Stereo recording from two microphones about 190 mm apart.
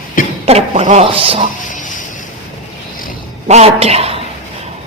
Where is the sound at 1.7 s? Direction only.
40° left (ahead or behind).